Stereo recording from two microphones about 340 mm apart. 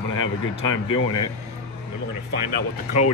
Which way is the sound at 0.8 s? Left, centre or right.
Left.